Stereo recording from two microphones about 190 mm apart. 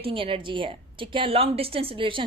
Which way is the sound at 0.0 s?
30° right (ahead or behind).